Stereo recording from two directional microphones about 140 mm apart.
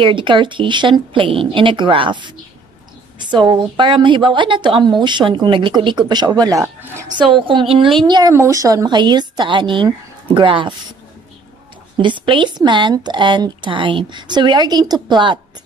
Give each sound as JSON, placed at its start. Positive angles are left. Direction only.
{"t": 0.0, "sound": "a woman's voice", "side_deg": -35}
{"t": 7.2, "sound": "a woman's voice", "side_deg": -35}
{"t": 8.0, "sound": "a woman's voice", "side_deg": -30}
{"t": 12.0, "sound": "a woman's voice", "side_deg": -35}